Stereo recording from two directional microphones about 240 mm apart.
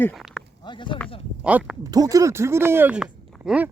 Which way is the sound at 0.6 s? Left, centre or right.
Centre.